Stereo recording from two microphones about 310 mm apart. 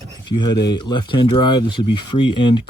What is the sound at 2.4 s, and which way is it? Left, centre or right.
Speech, left.